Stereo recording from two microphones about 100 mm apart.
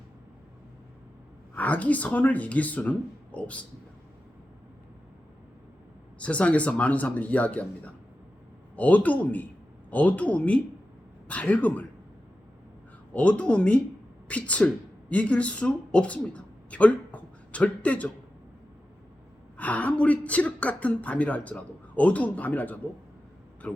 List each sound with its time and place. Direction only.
1.5 s a woman's voice: 15° left (ahead or behind)
6.1 s a woman's voice: 10° left (ahead or behind)
8.7 s a woman's voice: 15° left (ahead or behind)
13.1 s a woman's voice: 10° left (ahead or behind)
19.5 s a woman's voice: 15° left (ahead or behind)